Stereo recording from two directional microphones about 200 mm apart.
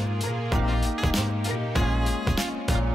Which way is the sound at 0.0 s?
Centre (ahead or behind).